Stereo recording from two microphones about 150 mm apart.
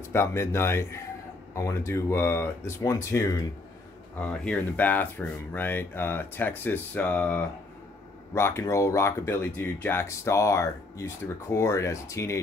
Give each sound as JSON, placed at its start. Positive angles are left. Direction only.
{"t": 0.1, "sound": "speech", "side_deg": 15}
{"t": 4.3, "sound": "speech", "side_deg": 10}